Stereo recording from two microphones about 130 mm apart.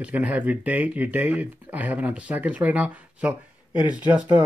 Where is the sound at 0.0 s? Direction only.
10° right (ahead or behind).